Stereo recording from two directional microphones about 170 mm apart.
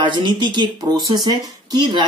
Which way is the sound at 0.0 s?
25° right (ahead or behind).